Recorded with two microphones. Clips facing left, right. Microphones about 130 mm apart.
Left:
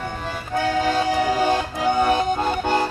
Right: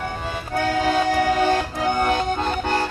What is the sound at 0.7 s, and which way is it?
Accordion, centre (ahead or behind).